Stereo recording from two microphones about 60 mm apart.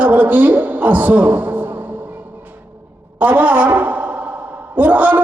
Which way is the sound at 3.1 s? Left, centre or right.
Right.